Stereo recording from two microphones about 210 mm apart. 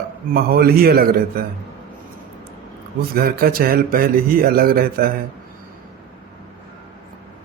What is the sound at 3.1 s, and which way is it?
Speech, 45° right (ahead or behind).